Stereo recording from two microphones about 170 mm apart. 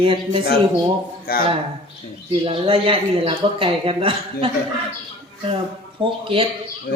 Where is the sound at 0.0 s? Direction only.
30° right (ahead or behind).